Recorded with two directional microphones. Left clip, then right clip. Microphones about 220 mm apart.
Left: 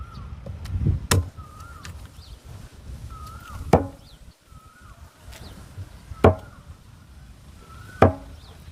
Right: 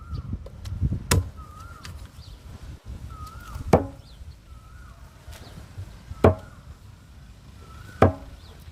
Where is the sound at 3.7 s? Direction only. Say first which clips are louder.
Left 1 dB; 5° right (ahead or behind).